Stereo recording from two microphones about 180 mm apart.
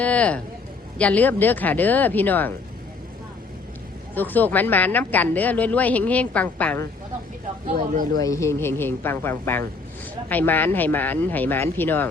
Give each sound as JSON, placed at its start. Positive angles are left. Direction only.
{"t": 0.0, "sound": "speech", "side_deg": 5}
{"t": 4.1, "sound": "speech", "side_deg": 10}
{"t": 7.7, "sound": "speech", "side_deg": -50}
{"t": 8.2, "sound": "speech", "side_deg": 15}